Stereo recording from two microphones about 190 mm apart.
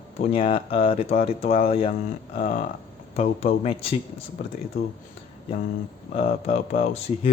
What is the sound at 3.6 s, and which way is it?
Speech, 30° left (ahead or behind).